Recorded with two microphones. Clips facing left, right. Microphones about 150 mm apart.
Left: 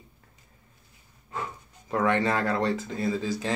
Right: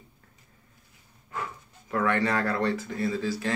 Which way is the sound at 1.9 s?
20° left (ahead or behind).